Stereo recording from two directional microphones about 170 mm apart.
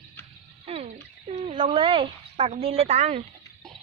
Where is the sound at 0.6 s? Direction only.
35° right (ahead or behind).